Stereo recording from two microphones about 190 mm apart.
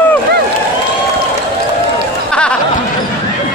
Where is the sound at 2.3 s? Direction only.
5° left (ahead or behind).